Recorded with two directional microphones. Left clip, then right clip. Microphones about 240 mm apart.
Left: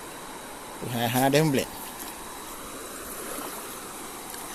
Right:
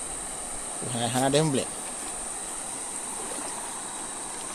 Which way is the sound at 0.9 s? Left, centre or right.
Centre.